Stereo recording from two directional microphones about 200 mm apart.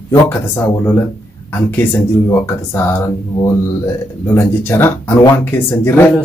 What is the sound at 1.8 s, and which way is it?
Speech, 10° left (ahead or behind).